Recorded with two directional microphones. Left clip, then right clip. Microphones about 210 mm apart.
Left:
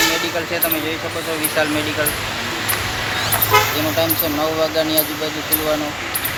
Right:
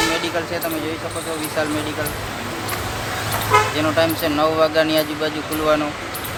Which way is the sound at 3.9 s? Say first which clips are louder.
Right 1 dB; 5° right (ahead or behind).